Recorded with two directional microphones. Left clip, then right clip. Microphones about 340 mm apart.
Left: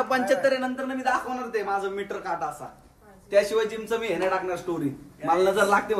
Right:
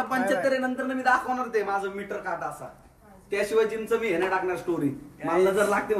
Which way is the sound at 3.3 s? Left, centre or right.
Centre.